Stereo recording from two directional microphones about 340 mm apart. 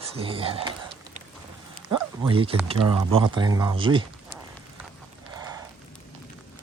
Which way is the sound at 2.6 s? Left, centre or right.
Centre.